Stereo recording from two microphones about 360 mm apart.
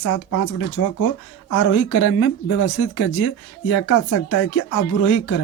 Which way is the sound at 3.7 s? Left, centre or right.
Left.